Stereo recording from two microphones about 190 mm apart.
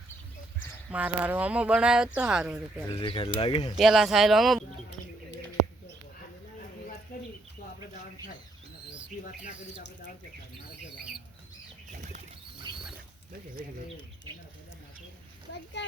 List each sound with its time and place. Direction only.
0.9 s speech: 5° right (ahead or behind)
2.9 s speech: 25° left (ahead or behind)
3.8 s speech: centre (ahead or behind)
7.1 s bird: 50° left (ahead or behind)
12.7 s mechanisms: 25° right (ahead or behind)